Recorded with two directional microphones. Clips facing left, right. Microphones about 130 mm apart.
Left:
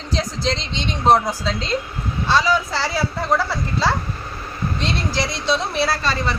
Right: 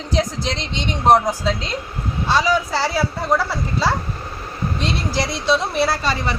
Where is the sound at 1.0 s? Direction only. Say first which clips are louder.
Right 2 dB; 15° right (ahead or behind).